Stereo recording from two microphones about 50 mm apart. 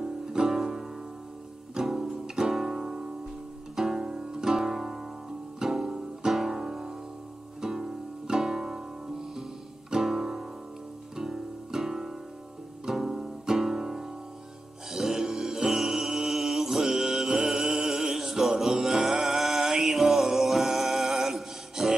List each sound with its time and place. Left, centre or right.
0.0 s music: centre
14.9 s mantra: centre